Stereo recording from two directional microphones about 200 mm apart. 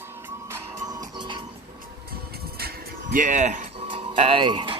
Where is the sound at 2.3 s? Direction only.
50° right (ahead or behind).